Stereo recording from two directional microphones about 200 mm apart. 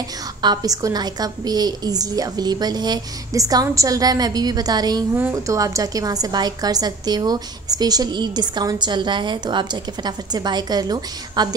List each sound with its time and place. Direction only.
0.4 s a woman's voice: 20° right (ahead or behind)